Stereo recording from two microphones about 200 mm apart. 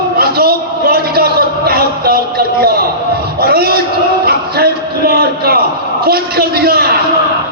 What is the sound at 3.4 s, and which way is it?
Speech, 50° right (ahead or behind).